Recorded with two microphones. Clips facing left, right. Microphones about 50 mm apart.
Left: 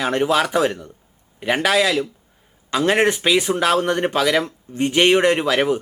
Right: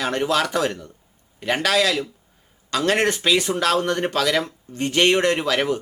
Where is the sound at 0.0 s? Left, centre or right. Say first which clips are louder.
Left 3 dB; centre.